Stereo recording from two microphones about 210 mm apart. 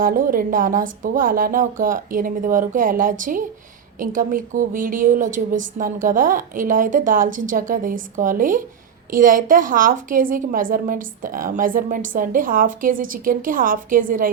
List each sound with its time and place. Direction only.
0.0 s a woman's voice: 40° right (ahead or behind)